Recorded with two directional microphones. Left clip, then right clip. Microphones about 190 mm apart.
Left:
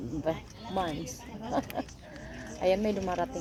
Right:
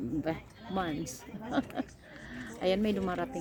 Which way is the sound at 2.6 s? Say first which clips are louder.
Left 3 dB; 20° right (ahead or behind).